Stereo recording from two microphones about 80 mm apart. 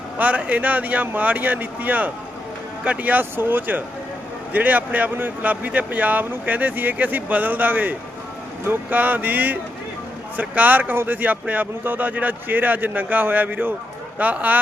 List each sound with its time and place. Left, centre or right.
0.2 s speech: centre